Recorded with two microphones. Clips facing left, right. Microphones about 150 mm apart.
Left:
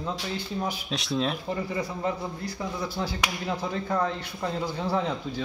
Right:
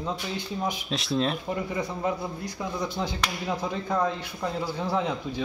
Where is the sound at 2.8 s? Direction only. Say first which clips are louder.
Right 2 dB; 20° right (ahead or behind).